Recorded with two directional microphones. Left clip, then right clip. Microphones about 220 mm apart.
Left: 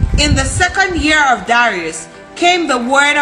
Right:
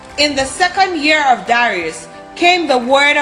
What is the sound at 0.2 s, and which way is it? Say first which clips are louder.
A man's voice: right 1 dB; 10° left (ahead or behind).